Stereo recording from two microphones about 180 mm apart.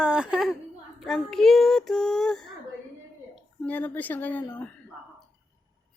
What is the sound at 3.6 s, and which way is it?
A woman's voice, 10° left (ahead or behind).